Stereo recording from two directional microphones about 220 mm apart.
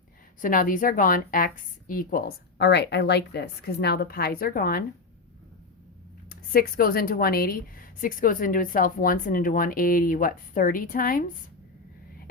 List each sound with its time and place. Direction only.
0.4 s a woman's voice: 40° left (ahead or behind)
6.2 s a woman's voice: 40° left (ahead or behind)